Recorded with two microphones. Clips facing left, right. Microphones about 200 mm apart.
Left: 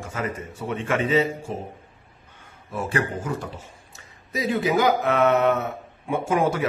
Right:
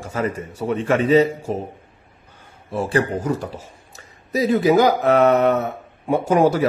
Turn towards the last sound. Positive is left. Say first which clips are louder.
# right 6 dB
turn(degrees=-35)  # may be behind; listen again after turning